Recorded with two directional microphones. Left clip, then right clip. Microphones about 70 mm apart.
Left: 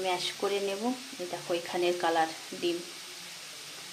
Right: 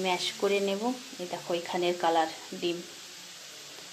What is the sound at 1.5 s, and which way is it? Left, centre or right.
Speech, centre.